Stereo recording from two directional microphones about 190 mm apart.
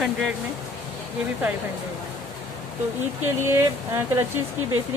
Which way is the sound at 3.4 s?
15° right (ahead or behind).